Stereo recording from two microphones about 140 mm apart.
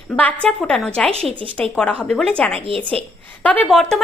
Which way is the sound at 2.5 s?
40° right (ahead or behind).